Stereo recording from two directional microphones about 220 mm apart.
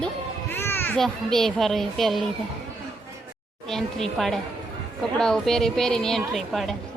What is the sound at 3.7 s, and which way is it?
A woman's voice, centre (ahead or behind).